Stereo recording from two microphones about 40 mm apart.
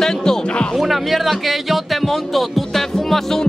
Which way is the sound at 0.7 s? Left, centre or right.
Centre.